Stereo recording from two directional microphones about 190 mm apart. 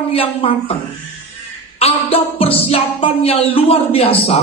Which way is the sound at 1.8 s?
30° left (ahead or behind).